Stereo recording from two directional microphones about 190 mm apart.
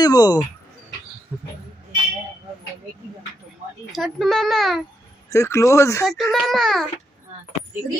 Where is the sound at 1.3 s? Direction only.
10° right (ahead or behind).